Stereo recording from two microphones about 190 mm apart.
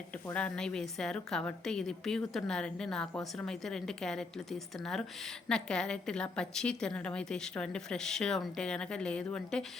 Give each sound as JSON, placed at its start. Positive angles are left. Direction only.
{"t": 0.3, "sound": "speech", "side_deg": 5}